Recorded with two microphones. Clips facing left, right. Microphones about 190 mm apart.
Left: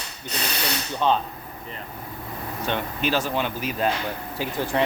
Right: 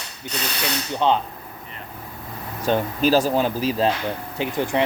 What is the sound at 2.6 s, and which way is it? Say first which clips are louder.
Speech: right 7 dB; 40° right (ahead or behind).